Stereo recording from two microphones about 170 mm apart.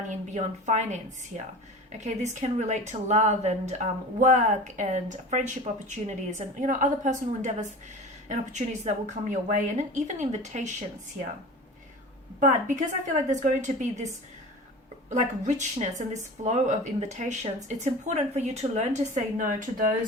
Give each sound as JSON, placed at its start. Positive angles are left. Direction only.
{"t": 0.1, "sound": "a woman's voice", "side_deg": -45}
{"t": 12.4, "sound": "a woman's voice", "side_deg": -45}